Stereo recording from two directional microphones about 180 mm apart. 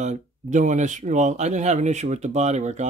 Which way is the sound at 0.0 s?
45° right (ahead or behind).